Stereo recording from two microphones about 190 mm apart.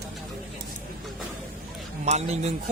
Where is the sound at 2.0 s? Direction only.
35° right (ahead or behind).